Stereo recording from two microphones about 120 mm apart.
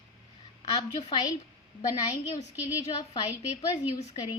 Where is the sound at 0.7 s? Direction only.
60° left (ahead or behind).